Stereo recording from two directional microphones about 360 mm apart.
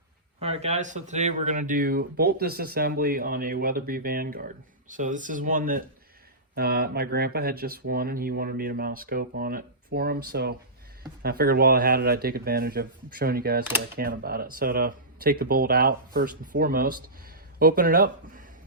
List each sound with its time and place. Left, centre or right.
0.3 s speech: centre